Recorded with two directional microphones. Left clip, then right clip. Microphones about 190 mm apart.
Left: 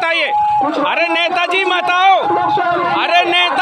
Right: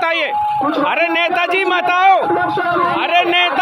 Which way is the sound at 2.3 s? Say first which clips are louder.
Left 2 dB; 55° right (ahead or behind).